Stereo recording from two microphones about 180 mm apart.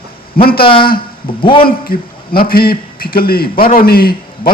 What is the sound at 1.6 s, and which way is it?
A man's voice, 55° left (ahead or behind).